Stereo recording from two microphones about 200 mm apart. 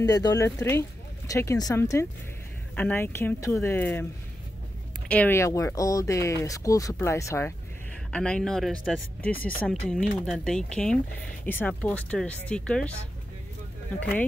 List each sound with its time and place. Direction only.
0.0 s speech: 20° left (ahead or behind)
5.0 s speech: 10° left (ahead or behind)